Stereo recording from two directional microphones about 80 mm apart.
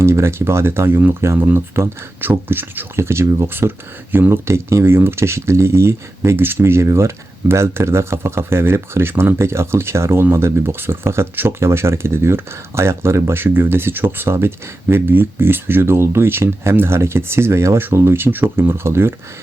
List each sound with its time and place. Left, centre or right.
0.0 s speech: right